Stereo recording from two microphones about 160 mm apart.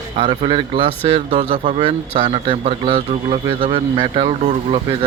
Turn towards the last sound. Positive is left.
turn(degrees=-35)  # may be behind; listen again after turning